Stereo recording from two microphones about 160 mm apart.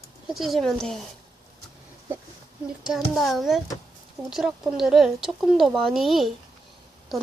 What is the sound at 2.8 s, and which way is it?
Speech, centre (ahead or behind).